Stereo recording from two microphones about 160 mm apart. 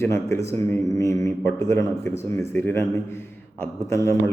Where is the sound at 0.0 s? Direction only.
15° left (ahead or behind).